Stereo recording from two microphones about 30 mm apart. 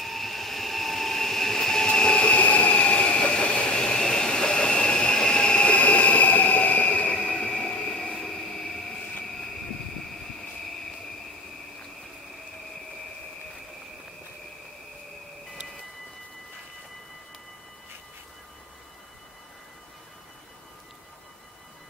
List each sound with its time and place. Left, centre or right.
0.0 s train: centre
1.9 s train: left
2.4 s train: left
8.0 s a sound: left
8.3 s train: centre